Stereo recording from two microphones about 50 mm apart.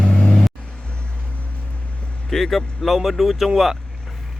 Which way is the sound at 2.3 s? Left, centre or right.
Centre.